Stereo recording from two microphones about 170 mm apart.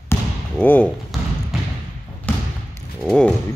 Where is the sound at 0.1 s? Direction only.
10° left (ahead or behind).